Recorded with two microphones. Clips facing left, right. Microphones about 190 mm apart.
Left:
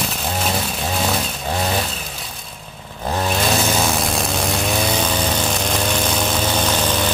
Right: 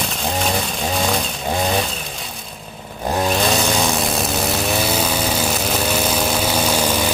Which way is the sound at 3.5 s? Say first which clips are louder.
Even; centre (ahead or behind).